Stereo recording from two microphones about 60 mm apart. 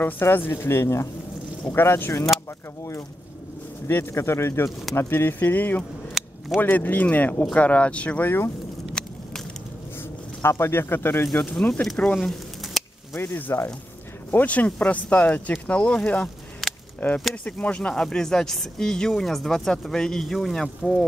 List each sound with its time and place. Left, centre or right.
0.0 s speech: left
3.8 s speech: left
4.9 s speech: left
6.2 s a sound: centre
6.6 s speech: left
8.2 s speech: left
9.0 s a sound: centre
10.4 s speech: left
11.3 s speech: centre
12.2 s a sound: centre
13.2 s speech: left
14.3 s speech: left
16.6 s cap gun: centre
17.5 s speech: centre